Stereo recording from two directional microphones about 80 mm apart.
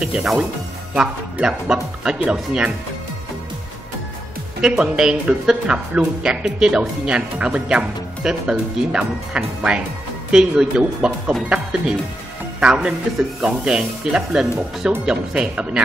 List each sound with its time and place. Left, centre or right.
0.0 s speech: centre
4.6 s speech: centre